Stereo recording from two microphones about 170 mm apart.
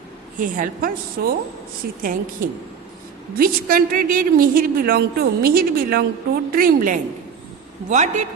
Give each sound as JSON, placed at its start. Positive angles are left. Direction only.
{"t": 0.3, "sound": "a woman's voice", "side_deg": -50}